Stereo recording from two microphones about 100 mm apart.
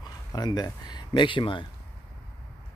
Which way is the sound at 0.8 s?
50° left (ahead or behind).